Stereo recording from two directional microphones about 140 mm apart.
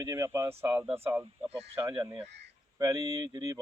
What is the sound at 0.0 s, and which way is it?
Speech, 20° right (ahead or behind).